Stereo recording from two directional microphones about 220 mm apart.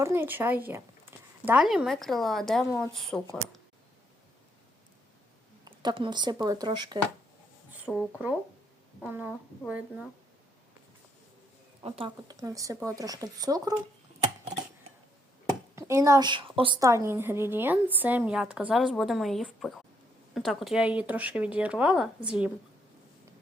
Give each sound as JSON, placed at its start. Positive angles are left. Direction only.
{"t": 0.0, "sound": "a woman's voice", "side_deg": -10}
{"t": 1.1, "sound": "a sound", "side_deg": -10}
{"t": 1.5, "sound": "a woman's voice", "side_deg": -5}
{"t": 5.6, "sound": "speech", "side_deg": -20}
{"t": 7.9, "sound": "a woman's voice", "side_deg": -5}
{"t": 11.8, "sound": "a woman's voice", "side_deg": -25}
{"t": 15.7, "sound": "a woman's voice", "side_deg": -15}